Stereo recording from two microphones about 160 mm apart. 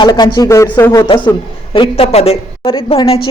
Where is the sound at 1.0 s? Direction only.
30° left (ahead or behind).